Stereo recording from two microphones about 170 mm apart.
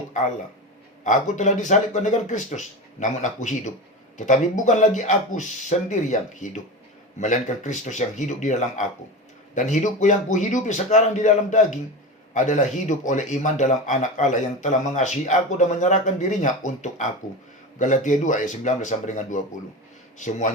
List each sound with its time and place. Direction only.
1.0 s speech: 45° left (ahead or behind)